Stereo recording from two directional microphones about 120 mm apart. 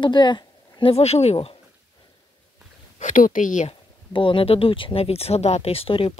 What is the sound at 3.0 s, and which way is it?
Speech, 90° left.